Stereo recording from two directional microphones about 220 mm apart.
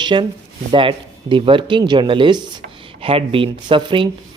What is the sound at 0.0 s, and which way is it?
Speech, 20° right (ahead or behind).